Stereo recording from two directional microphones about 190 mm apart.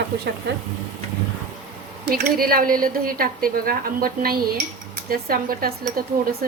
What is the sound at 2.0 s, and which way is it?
A woman's voice, 55° right (ahead or behind).